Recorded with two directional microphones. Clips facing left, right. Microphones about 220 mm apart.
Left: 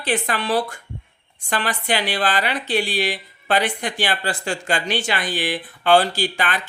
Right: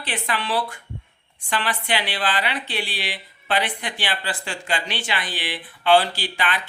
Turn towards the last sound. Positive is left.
turn(degrees=45)  # may be behind; listen again after turning